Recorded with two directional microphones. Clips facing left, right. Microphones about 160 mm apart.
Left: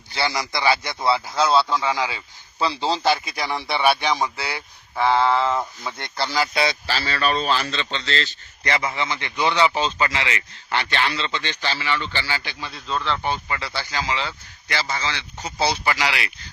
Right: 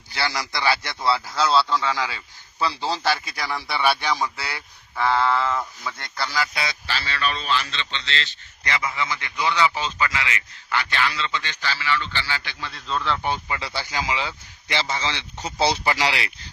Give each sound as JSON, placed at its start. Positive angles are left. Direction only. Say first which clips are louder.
{"t": 0.2, "sound": "a man's voice", "louder": "left 2 dB", "side_deg": 15}
{"t": 12.9, "sound": "speech", "louder": "even", "side_deg": 0}
{"t": 13.2, "sound": "speech", "louder": "left 1 dB", "side_deg": -15}